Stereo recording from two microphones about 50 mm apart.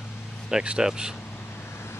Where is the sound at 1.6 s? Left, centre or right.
Left.